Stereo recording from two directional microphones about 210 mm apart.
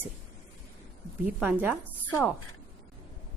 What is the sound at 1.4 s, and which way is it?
Speech, 5° right (ahead or behind).